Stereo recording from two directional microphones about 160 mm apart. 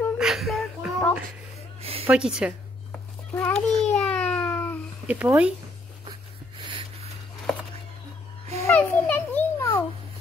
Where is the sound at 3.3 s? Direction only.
10° left (ahead or behind).